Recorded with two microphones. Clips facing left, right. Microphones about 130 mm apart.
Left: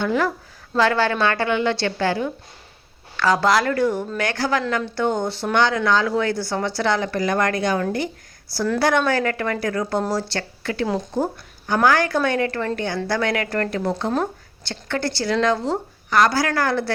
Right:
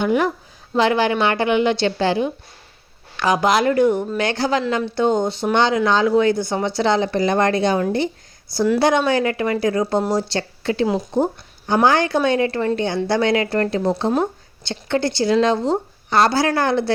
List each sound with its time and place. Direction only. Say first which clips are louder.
0.0 s a woman's voice: right 3 dB; 20° right (ahead or behind)